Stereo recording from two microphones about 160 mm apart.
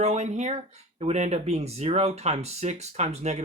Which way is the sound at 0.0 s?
45° right (ahead or behind).